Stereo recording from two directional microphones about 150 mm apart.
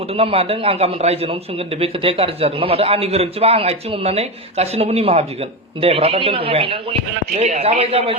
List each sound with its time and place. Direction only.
0.1 s a man's voice: 40° right (ahead or behind)